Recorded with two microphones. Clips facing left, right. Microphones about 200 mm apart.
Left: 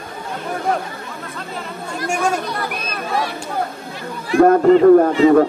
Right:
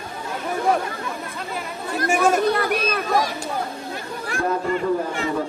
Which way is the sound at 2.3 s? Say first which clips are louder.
Right 4 dB; 55° right (ahead or behind).